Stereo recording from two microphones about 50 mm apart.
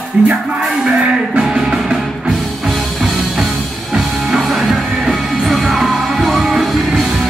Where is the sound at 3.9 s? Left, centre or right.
Centre.